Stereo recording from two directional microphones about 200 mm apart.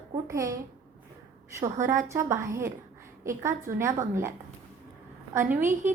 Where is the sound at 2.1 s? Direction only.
15° right (ahead or behind).